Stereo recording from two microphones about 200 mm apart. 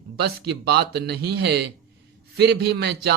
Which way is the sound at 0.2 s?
50° right (ahead or behind).